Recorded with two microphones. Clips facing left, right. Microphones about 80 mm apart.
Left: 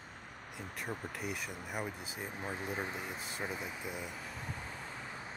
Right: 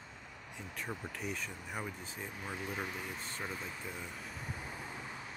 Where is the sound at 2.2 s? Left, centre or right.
Left.